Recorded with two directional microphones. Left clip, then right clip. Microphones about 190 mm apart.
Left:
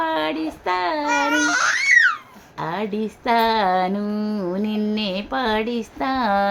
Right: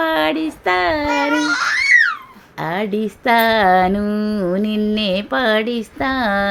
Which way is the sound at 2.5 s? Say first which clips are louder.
Right 4 dB; 30° right (ahead or behind).